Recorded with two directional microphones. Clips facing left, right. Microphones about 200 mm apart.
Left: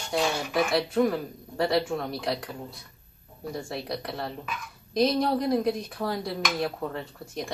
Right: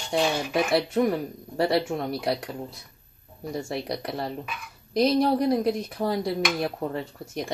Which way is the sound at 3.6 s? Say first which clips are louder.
Right 3 dB; 25° right (ahead or behind).